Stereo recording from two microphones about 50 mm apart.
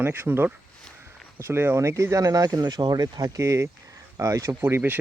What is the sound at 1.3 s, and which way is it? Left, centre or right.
Speech, right.